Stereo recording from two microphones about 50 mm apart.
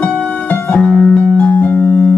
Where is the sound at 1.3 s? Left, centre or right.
Left.